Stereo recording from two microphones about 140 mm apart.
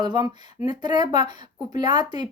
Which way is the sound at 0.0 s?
30° right (ahead or behind).